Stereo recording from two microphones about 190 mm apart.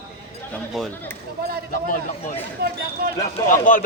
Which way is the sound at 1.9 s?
45° left (ahead or behind).